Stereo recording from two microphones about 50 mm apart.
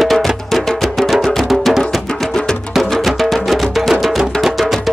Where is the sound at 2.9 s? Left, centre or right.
Centre.